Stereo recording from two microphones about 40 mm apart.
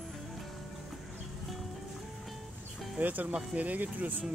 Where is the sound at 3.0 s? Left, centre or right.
Right.